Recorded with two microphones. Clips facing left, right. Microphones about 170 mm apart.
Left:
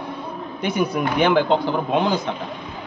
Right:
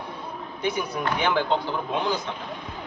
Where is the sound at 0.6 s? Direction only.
70° left (ahead or behind).